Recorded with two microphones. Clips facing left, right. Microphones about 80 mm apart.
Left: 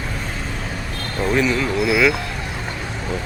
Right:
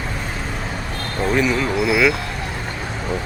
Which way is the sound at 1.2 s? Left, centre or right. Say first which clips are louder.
Even; centre.